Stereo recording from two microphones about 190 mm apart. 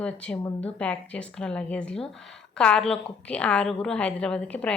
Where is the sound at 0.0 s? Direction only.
5° left (ahead or behind).